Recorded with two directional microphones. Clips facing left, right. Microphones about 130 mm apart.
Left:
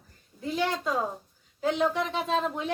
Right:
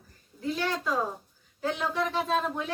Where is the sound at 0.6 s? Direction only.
20° left (ahead or behind).